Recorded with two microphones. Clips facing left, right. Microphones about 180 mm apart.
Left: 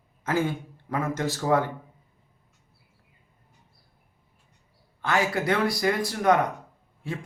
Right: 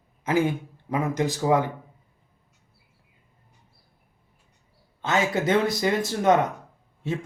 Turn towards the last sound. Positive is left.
turn(degrees=-20)  # may be behind; listen again after turning